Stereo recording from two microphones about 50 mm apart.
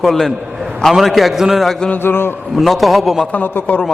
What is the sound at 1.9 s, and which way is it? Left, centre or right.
Speech, left.